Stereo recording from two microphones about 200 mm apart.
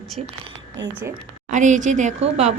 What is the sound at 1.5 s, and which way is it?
A woman's voice, 40° right (ahead or behind).